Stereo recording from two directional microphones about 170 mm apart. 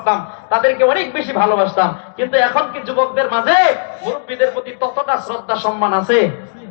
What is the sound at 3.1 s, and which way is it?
Speech, 20° right (ahead or behind).